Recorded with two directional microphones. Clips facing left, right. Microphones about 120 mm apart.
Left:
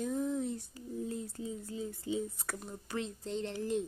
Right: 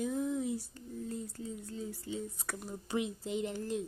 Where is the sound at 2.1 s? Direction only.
15° left (ahead or behind).